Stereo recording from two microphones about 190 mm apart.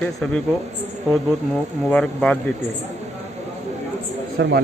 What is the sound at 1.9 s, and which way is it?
Speech, 5° left (ahead or behind).